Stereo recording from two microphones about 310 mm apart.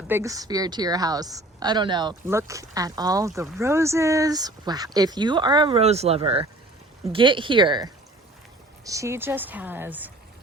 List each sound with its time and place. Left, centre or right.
0.1 s a woman's voice: centre